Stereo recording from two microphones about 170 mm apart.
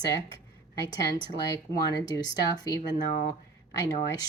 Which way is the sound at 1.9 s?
20° left (ahead or behind).